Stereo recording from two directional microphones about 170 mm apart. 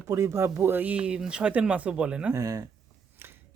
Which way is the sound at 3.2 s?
15° right (ahead or behind).